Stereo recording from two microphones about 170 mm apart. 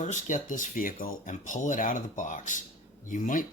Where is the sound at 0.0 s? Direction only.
45° left (ahead or behind).